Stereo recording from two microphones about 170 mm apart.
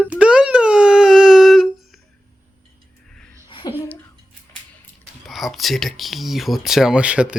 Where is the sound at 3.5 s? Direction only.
30° left (ahead or behind).